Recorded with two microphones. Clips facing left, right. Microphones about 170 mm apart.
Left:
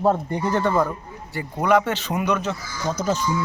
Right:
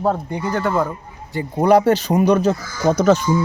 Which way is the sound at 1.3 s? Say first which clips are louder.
Right 7 dB; 25° right (ahead or behind).